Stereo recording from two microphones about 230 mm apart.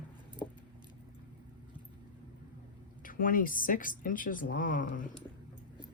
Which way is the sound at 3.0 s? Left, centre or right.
Left.